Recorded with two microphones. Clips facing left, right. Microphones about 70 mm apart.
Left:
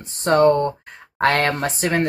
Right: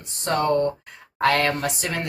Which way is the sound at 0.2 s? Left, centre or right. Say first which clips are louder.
Left 6 dB; left.